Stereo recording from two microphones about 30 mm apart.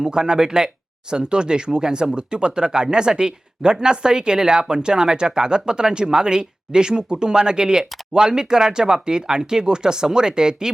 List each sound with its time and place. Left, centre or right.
0.0 s speech: right